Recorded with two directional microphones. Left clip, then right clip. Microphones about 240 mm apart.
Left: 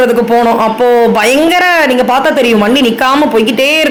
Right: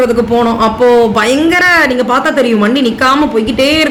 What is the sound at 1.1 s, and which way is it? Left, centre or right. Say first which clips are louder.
Speech: left 2 dB; centre.